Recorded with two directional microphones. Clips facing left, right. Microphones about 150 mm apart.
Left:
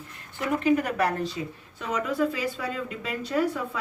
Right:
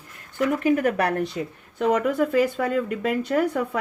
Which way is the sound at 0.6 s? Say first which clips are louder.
Right 1 dB; 50° right (ahead or behind).